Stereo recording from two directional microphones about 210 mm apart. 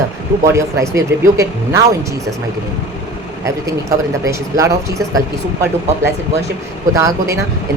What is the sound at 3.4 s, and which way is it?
A man's voice, 15° right (ahead or behind).